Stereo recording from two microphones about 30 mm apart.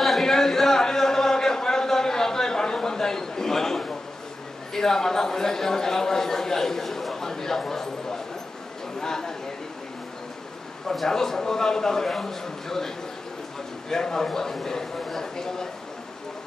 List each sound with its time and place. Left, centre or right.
0.2 s a sound: centre
4.7 s speech: centre
9.0 s speech: centre
11.1 s speech: centre